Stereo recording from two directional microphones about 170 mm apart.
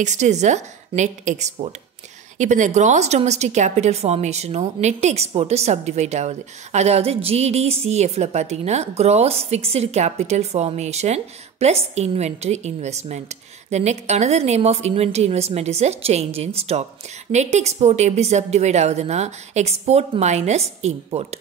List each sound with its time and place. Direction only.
0.0 s a woman's voice: 45° right (ahead or behind)